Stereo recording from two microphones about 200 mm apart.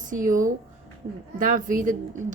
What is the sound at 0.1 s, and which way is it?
A woman's voice, 40° right (ahead or behind).